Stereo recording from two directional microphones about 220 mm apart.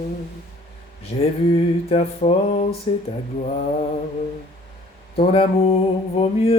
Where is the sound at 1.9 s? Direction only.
30° left (ahead or behind).